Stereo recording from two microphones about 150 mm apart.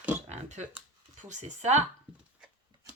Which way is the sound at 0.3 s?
50° right (ahead or behind).